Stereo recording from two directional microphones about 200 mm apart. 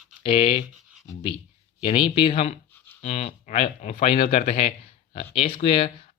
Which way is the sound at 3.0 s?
30° left (ahead or behind).